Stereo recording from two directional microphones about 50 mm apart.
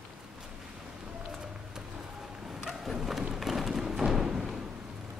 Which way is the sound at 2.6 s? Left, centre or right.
Centre.